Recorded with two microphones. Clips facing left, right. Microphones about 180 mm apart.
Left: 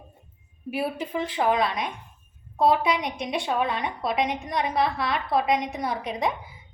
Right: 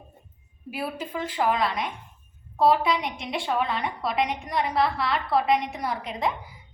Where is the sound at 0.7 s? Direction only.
25° left (ahead or behind).